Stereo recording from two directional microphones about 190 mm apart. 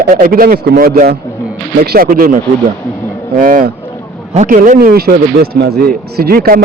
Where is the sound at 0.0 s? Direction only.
50° right (ahead or behind).